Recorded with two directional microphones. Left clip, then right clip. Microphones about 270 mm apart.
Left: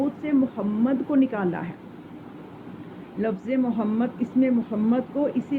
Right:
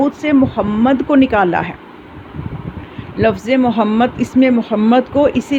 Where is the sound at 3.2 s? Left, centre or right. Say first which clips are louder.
Right 12 dB; right.